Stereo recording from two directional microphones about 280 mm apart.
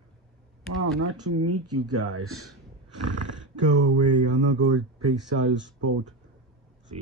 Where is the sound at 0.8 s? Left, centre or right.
Right.